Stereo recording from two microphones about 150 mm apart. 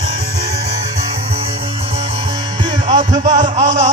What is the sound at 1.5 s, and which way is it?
Music, 35° right (ahead or behind).